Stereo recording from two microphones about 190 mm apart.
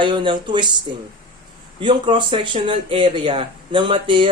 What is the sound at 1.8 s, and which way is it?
Speech, 25° right (ahead or behind).